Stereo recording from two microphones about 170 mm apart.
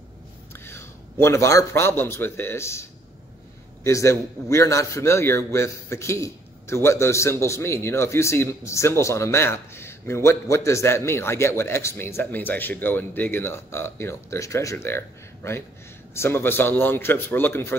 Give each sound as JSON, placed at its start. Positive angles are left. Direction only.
{"t": 0.5, "sound": "a man's voice", "side_deg": 15}